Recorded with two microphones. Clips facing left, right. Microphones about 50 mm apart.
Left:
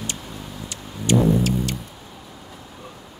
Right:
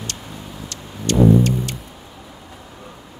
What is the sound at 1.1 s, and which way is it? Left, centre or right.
Music, centre.